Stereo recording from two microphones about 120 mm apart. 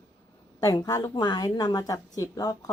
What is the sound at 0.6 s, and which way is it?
A woman's voice, 30° left (ahead or behind).